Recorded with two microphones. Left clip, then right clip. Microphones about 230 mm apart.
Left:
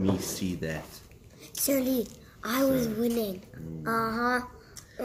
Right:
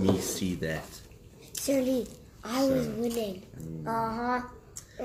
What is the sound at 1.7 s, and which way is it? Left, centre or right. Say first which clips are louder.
Child singing: even; left.